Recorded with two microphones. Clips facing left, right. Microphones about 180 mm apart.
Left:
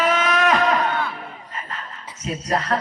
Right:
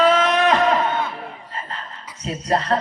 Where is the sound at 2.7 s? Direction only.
30° right (ahead or behind).